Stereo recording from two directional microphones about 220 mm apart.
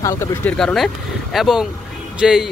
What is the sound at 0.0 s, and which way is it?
Speech, 10° left (ahead or behind).